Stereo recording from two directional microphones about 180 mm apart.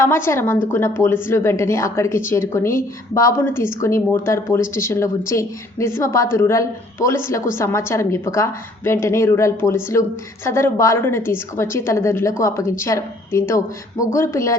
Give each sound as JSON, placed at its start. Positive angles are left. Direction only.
{"t": 0.0, "sound": "a woman's voice", "side_deg": 15}